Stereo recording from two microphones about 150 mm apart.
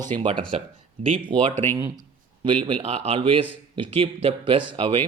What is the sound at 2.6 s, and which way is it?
A man's voice, 40° right (ahead or behind).